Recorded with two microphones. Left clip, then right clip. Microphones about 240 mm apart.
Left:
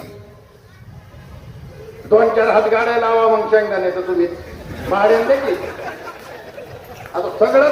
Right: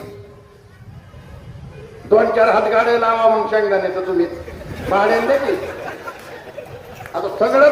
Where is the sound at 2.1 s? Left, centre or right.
Right.